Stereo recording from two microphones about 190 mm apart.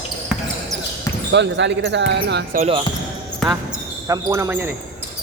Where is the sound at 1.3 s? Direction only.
65° right (ahead or behind).